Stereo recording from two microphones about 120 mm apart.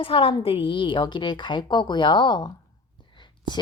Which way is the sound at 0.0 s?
50° left (ahead or behind).